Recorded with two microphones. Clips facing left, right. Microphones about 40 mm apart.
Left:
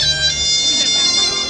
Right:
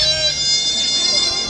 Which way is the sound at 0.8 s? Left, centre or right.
Left.